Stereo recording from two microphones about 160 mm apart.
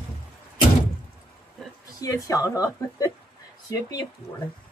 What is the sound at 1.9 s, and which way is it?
Speech, 20° left (ahead or behind).